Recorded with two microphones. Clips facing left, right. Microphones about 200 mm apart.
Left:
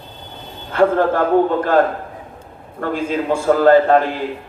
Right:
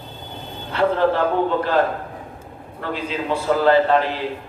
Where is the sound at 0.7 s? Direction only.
50° left (ahead or behind).